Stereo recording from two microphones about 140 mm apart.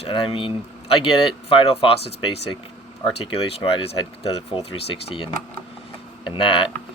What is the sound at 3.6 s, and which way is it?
Speech, 40° left (ahead or behind).